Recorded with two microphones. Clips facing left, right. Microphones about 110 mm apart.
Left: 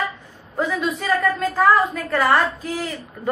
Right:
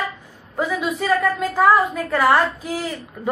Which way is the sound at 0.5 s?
5° right (ahead or behind).